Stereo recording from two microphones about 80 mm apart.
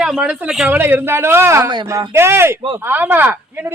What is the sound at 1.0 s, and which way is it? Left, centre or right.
A man's voice, right.